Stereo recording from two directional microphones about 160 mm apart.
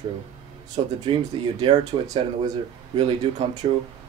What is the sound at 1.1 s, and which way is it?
Speech, 35° right (ahead or behind).